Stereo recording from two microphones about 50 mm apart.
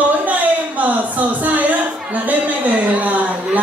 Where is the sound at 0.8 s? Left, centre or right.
Right.